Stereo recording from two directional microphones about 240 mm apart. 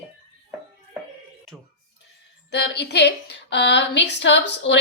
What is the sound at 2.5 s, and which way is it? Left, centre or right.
A woman's voice, left.